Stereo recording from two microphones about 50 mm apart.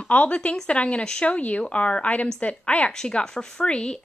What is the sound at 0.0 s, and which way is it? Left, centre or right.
A woman's voice, left.